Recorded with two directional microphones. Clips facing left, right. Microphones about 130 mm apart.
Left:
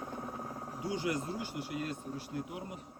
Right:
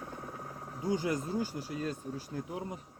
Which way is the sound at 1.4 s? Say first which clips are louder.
Right 3 dB; 35° right (ahead or behind).